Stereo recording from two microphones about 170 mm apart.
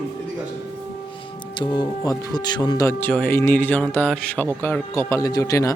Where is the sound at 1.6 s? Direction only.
25° left (ahead or behind).